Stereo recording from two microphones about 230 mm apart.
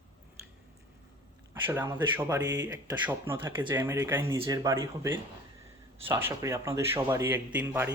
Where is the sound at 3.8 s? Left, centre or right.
Centre.